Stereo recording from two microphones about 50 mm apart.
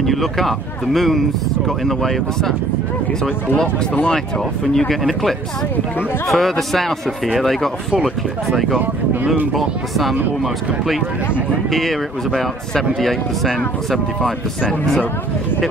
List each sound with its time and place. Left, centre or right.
0.0 s speech: centre
3.6 s speech: left
4.7 s speech: centre
9.2 s speech: right
9.5 s speech: centre
11.7 s speech: centre